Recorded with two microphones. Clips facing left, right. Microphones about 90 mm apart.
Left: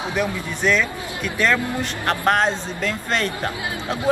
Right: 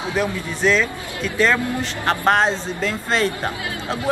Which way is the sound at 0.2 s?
5° left (ahead or behind).